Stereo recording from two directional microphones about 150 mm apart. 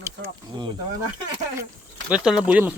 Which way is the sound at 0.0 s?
20° right (ahead or behind).